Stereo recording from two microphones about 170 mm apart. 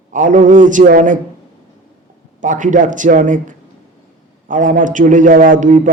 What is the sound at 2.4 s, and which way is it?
A man's voice, 50° right (ahead or behind).